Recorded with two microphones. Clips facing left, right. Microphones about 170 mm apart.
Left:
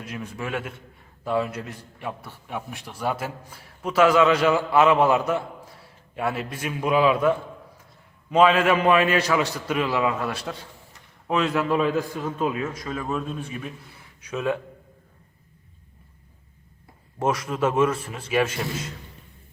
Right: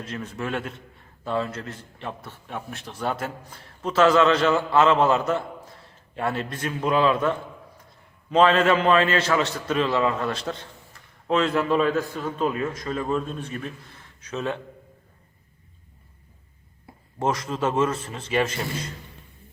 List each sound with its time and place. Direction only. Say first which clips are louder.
0.0 s a man's voice: right 1 dB; 10° left (ahead or behind)
17.2 s a man's voice: left 1 dB; 10° left (ahead or behind)